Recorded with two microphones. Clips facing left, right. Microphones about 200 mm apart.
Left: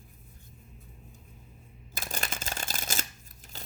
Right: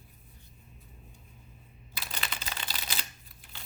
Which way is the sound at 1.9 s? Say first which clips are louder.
Left 4 dB; 45° left (ahead or behind).